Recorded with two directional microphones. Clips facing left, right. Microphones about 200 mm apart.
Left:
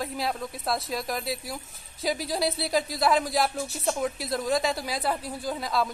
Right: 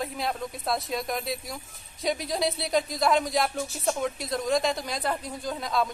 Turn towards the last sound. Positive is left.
turn(degrees=0)  # may be behind; listen again after turning